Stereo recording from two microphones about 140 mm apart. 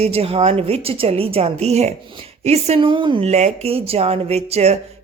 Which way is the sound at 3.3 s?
55° right (ahead or behind).